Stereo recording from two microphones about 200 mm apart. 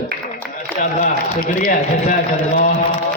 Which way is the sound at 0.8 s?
35° left (ahead or behind).